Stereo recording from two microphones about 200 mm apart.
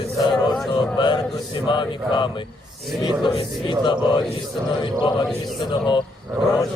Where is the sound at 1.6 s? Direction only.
25° left (ahead or behind).